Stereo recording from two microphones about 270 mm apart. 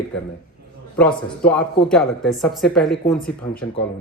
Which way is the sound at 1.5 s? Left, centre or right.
Centre.